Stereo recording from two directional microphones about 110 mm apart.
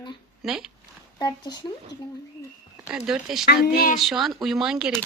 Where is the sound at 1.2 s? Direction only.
40° left (ahead or behind).